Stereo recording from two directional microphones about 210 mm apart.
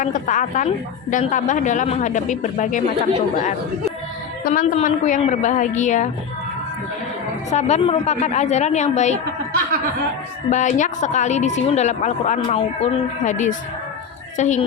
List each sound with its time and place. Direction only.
0.0 s a woman's voice: 40° left (ahead or behind)
4.5 s a woman's voice: 35° left (ahead or behind)
7.5 s a woman's voice: 30° left (ahead or behind)
10.5 s a woman's voice: 35° left (ahead or behind)